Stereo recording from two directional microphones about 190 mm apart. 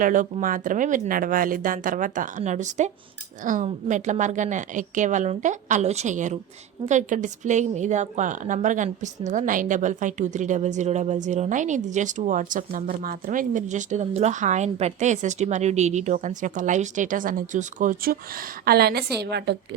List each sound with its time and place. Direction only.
0.0 s a woman's voice: 45° right (ahead or behind); by 19.5 s 60° right (ahead or behind)